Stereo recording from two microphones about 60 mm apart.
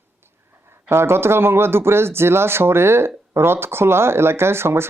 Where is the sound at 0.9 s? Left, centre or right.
Right.